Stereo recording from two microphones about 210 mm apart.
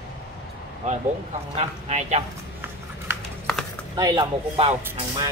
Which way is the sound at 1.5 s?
30° right (ahead or behind).